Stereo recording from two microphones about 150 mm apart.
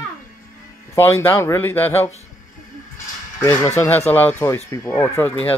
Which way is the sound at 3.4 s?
15° left (ahead or behind).